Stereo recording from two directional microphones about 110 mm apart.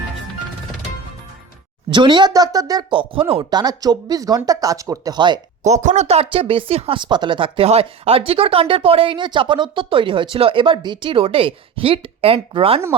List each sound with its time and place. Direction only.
1.9 s speech: 45° right (ahead or behind)
2.9 s speech: 50° right (ahead or behind)
3.5 s speech: 35° right (ahead or behind)
5.6 s speech: 90° right; by 12.8 s 60° right (ahead or behind)